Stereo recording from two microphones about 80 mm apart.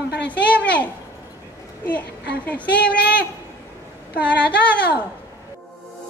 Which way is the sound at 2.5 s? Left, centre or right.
Centre.